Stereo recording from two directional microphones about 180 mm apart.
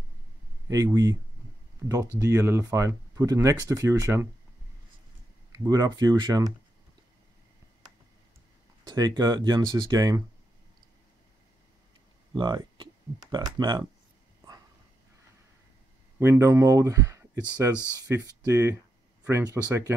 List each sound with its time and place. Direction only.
0.7 s speech: 20° right (ahead or behind)
5.5 s speech: 20° right (ahead or behind)
8.8 s speech: 20° right (ahead or behind)
12.4 s hum: 25° right (ahead or behind)
13.3 s speech: 25° right (ahead or behind)
16.2 s speech: 15° right (ahead or behind)